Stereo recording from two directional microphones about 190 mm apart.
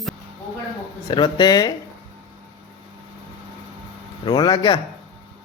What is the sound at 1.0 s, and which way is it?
Speech, 25° left (ahead or behind).